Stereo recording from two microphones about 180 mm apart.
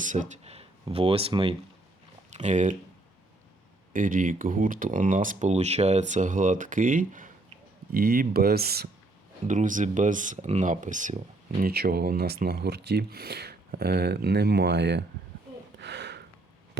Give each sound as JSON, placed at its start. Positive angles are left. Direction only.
{"t": 0.0, "sound": "speech", "side_deg": -45}
{"t": 2.3, "sound": "speech", "side_deg": -40}
{"t": 3.9, "sound": "speech", "side_deg": -50}
{"t": 7.9, "sound": "speech", "side_deg": -55}
{"t": 9.5, "sound": "speech", "side_deg": -45}
{"t": 11.7, "sound": "speech", "side_deg": -60}
{"t": 15.8, "sound": "gasp", "side_deg": -70}